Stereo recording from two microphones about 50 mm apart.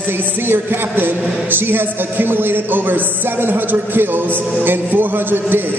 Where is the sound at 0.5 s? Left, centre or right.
Right.